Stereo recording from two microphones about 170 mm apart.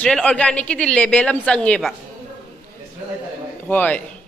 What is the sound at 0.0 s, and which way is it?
Speech, 5° left (ahead or behind).